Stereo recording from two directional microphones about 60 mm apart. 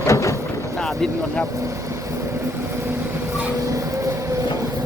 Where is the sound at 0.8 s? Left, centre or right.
Centre.